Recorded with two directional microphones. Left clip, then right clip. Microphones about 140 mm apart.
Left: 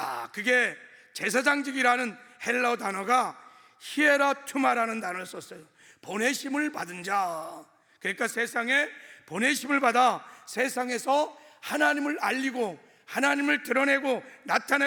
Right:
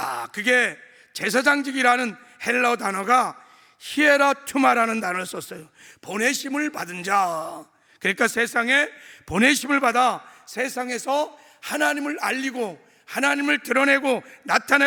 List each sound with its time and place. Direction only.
0.0 s a man's voice: 35° right (ahead or behind)
8.0 s a man's voice: 45° right (ahead or behind)
9.4 s a man's voice: 30° right (ahead or behind)
9.8 s a man's voice: 10° right (ahead or behind)